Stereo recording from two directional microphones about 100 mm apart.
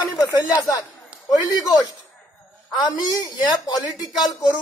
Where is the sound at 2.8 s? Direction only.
45° left (ahead or behind).